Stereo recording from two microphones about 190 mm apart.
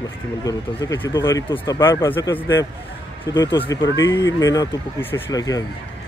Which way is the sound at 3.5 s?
25° left (ahead or behind).